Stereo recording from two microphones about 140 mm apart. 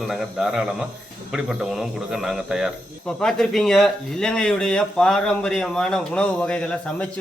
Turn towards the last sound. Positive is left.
turn(degrees=5)  # may be behind; listen again after turning